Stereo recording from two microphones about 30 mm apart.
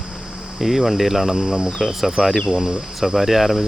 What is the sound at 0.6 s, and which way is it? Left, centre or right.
Speech, centre.